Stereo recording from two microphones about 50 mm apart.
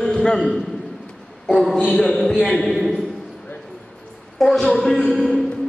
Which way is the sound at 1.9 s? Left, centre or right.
Centre.